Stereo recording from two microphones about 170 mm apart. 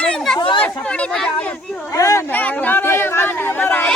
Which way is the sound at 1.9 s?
20° left (ahead or behind).